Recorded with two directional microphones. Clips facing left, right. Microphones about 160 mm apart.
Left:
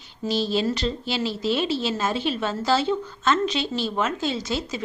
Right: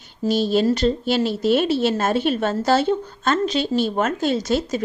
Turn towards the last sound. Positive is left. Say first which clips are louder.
# right 7 dB
turn(degrees=-45)  # may be behind; listen again after turning